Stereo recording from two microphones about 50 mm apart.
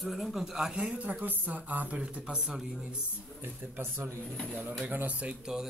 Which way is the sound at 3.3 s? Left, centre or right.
Right.